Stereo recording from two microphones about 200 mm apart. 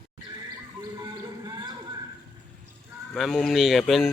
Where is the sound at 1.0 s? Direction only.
20° right (ahead or behind).